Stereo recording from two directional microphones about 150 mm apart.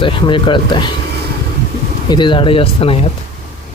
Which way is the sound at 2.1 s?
30° left (ahead or behind).